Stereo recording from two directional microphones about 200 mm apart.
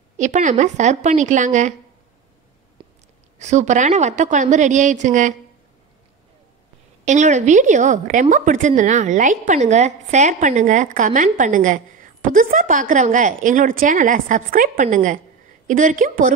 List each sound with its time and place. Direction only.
0.2 s a woman's voice: 35° right (ahead or behind)
2.8 s chewing: 25° right (ahead or behind)
3.3 s a woman's voice: 35° right (ahead or behind)
7.1 s a woman's voice: 35° right (ahead or behind)